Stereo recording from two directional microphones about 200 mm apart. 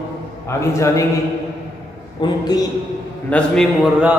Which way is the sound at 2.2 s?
20° left (ahead or behind).